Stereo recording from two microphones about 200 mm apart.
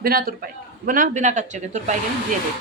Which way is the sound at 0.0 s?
50° right (ahead or behind).